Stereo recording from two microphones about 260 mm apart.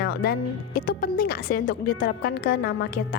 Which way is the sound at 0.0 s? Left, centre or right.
Left.